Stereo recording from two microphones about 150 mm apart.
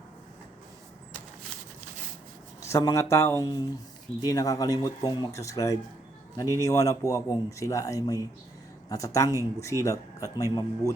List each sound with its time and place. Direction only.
2.6 s speech: 20° left (ahead or behind)